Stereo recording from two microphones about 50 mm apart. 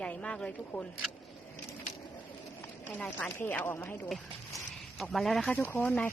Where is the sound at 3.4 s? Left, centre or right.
Left.